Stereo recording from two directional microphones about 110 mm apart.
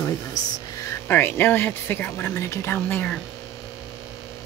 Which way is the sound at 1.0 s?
20° left (ahead or behind).